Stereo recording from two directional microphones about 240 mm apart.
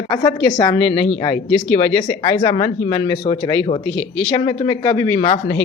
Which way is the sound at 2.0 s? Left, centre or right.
Left.